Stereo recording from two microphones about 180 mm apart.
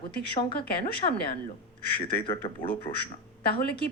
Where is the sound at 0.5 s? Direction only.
60° left (ahead or behind).